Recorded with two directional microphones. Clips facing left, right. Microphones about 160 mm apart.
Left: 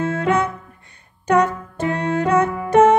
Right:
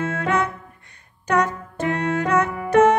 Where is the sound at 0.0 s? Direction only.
30° left (ahead or behind).